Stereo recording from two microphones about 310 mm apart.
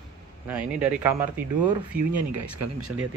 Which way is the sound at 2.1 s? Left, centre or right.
Right.